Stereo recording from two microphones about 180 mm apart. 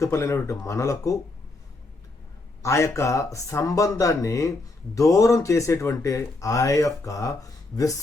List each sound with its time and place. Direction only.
0.0 s speech: 15° left (ahead or behind)
2.6 s speech: 15° left (ahead or behind)